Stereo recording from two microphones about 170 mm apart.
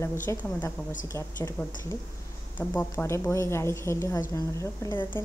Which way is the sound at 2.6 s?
15° left (ahead or behind).